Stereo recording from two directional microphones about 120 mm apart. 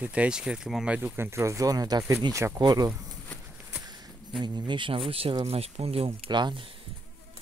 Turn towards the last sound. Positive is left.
turn(degrees=-40)  # may be behind; listen again after turning